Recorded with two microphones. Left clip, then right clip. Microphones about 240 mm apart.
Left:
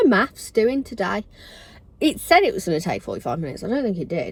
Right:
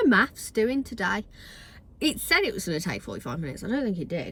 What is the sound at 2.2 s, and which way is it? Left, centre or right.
A woman's voice, left.